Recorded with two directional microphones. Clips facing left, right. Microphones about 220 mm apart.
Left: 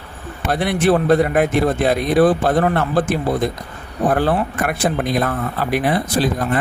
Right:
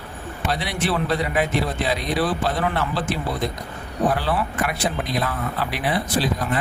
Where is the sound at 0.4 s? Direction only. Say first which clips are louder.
Left 8 dB; 50° left (ahead or behind).